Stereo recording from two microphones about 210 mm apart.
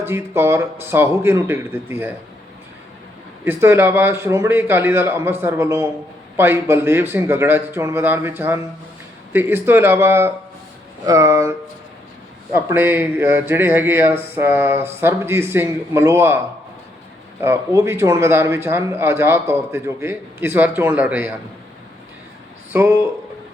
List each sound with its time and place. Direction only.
0.0 s a man's voice: 10° right (ahead or behind)
3.4 s a man's voice: 10° right (ahead or behind)
12.5 s a man's voice: 10° right (ahead or behind)
17.4 s a man's voice: 10° right (ahead or behind)
22.7 s speech: 10° right (ahead or behind)